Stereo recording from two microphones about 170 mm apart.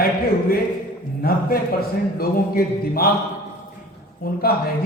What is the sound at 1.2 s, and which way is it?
A man's voice, 60° left (ahead or behind).